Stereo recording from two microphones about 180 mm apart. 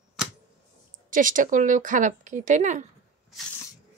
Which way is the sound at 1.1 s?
50° right (ahead or behind).